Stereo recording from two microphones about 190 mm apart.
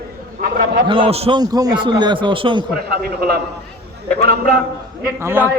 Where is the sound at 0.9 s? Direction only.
30° right (ahead or behind).